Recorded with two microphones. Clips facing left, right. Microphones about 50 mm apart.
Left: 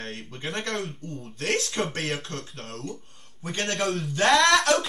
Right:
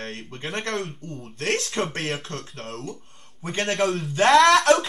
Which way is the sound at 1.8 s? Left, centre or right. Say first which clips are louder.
Right 2 dB; right.